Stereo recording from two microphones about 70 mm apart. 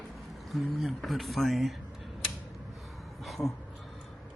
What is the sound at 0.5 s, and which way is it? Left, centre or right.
A man's voice, centre.